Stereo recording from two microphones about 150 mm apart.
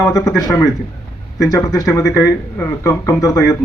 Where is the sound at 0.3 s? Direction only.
20° left (ahead or behind).